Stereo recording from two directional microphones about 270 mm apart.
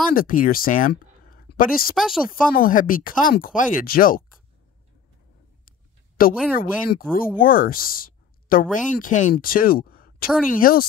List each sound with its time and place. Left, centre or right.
0.1 s speech: left
2.0 s speech: centre
2.5 s speech: left
5.7 s a sound: left
6.5 s speech: left